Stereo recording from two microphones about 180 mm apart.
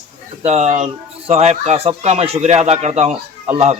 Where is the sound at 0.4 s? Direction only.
35° right (ahead or behind).